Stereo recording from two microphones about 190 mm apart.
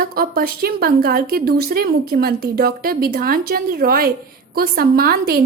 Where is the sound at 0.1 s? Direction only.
50° right (ahead or behind).